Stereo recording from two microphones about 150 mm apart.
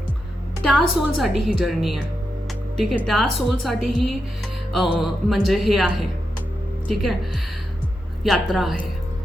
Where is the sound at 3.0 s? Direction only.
Centre (ahead or behind).